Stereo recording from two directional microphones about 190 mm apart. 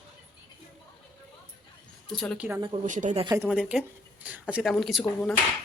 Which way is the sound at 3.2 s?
20° right (ahead or behind).